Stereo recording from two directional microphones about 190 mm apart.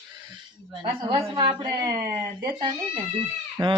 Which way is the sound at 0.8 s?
25° right (ahead or behind).